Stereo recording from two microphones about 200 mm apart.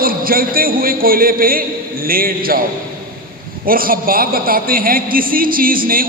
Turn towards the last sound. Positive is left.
turn(degrees=-45)  # may be behind; listen again after turning